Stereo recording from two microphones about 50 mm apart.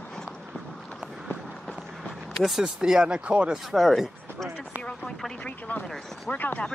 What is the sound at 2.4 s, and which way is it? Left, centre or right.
Speech, centre.